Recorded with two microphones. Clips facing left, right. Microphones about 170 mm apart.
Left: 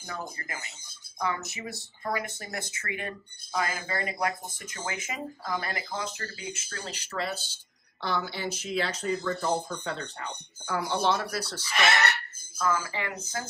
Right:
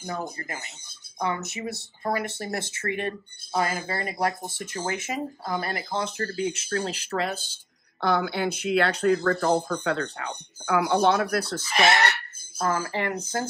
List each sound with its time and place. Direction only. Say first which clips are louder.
0.0 s speech: right 6 dB; 35° right (ahead or behind)
6.1 s speech: right 11 dB; 55° right (ahead or behind)
11.7 s speech: right 4 dB; 35° right (ahead or behind)
12.5 s speech: right 3 dB; 50° right (ahead or behind)